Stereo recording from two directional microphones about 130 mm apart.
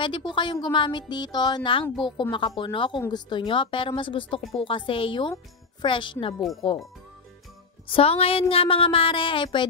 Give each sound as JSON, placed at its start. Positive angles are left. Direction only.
{"t": 0.0, "sound": "speech", "side_deg": 40}
{"t": 7.9, "sound": "speech", "side_deg": 50}